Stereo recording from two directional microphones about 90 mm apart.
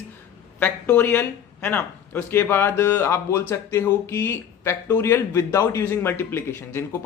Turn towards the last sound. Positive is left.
turn(degrees=25)  # may be behind; listen again after turning